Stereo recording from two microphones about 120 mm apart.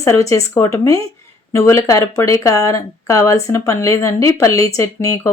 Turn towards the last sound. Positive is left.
turn(degrees=25)  # may be behind; listen again after turning